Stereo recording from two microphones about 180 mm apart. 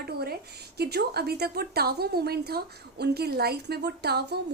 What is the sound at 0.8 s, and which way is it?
A woman's voice, 60° right (ahead or behind).